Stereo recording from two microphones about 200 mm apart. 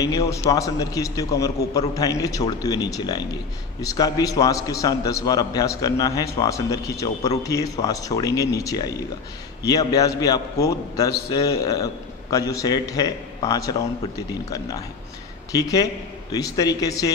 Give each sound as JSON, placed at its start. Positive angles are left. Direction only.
{"t": 0.5, "sound": "a man's voice", "side_deg": 15}
{"t": 15.5, "sound": "a man's voice", "side_deg": 15}